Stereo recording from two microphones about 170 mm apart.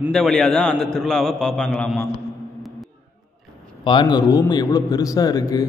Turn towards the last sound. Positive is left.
turn(degrees=20)  # may be behind; listen again after turning